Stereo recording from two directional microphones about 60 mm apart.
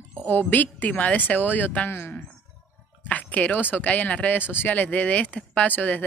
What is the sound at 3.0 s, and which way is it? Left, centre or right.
Speech, left.